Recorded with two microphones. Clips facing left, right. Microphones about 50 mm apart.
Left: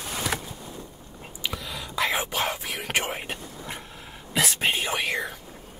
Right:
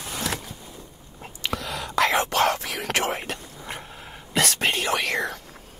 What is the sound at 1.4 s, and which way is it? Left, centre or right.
Whispering, right.